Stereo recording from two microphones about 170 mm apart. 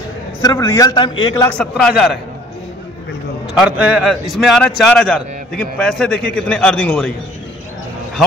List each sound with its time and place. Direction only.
0.4 s a man's voice: 20° left (ahead or behind)
1.5 s a man's voice: 5° left (ahead or behind)
3.6 s a man's voice: 5° right (ahead or behind)